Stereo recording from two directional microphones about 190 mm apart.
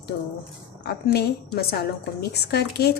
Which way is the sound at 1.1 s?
55° left (ahead or behind).